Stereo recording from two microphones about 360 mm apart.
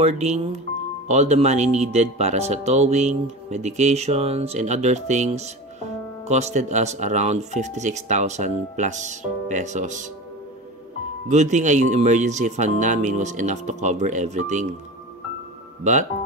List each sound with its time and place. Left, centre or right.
0.0 s speech: centre
11.2 s speech: centre
15.8 s speech: centre